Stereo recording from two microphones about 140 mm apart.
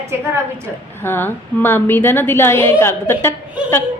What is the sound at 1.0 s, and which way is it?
A woman's voice, 15° left (ahead or behind).